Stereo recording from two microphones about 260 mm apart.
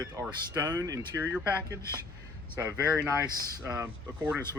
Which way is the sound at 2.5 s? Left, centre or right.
Centre.